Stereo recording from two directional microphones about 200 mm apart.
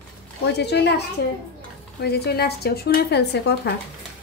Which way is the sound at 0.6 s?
55° left (ahead or behind).